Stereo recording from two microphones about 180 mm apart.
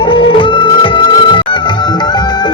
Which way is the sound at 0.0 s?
30° left (ahead or behind).